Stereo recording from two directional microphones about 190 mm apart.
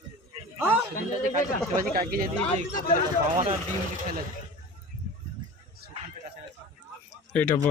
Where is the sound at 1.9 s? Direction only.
50° right (ahead or behind).